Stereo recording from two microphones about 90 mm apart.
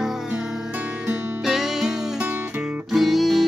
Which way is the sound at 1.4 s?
5° right (ahead or behind).